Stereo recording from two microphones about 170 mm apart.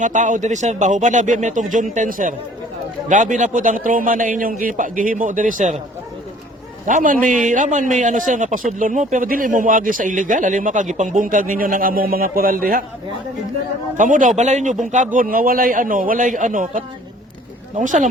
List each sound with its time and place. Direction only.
0.0 s a man's voice: 45° right (ahead or behind)
6.8 s a man's voice: 50° right (ahead or behind)
13.9 s a man's voice: 50° right (ahead or behind)